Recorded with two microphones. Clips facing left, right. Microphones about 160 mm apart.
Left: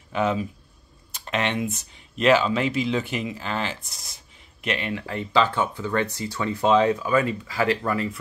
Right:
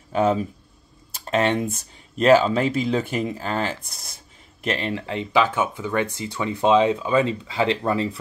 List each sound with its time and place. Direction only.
0.1 s speech: 40° right (ahead or behind)